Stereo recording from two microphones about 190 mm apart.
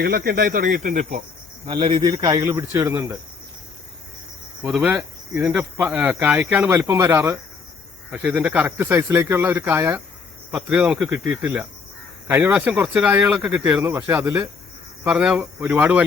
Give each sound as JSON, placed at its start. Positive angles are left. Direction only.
{"t": 0.0, "sound": "speech", "side_deg": -50}
{"t": 1.6, "sound": "speech", "side_deg": -25}
{"t": 4.6, "sound": "speech", "side_deg": -5}